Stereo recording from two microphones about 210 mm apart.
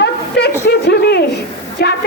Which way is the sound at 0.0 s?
50° left (ahead or behind).